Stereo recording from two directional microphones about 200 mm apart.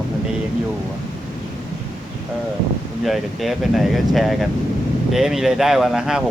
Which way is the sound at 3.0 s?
Centre (ahead or behind).